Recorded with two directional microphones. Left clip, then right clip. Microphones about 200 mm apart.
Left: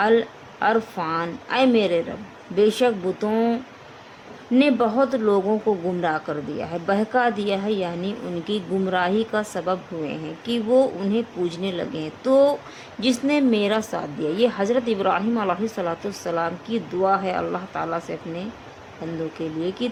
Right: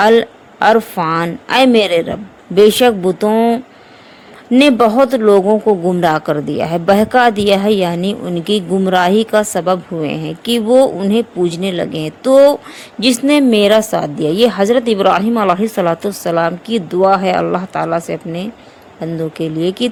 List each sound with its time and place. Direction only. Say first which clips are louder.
0.0 s a woman's voice: right 9 dB; 45° right (ahead or behind)